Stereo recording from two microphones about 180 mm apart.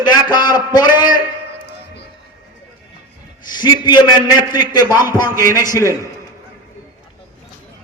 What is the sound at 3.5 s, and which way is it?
A man's voice, 25° left (ahead or behind).